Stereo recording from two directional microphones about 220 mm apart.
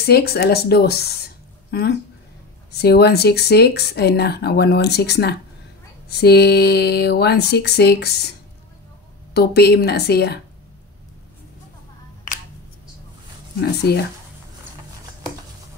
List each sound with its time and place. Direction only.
0.0 s speech: 45° left (ahead or behind)